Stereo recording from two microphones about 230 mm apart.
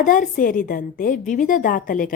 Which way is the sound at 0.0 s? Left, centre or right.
Left.